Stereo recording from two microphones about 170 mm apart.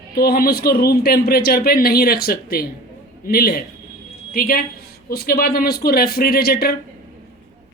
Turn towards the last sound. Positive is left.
turn(degrees=65)  # may be behind; listen again after turning